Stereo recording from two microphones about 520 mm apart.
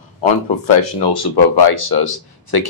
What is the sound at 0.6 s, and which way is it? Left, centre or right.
Speech, left.